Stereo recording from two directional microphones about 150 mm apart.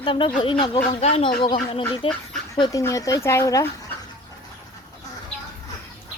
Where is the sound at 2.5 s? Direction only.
20° left (ahead or behind).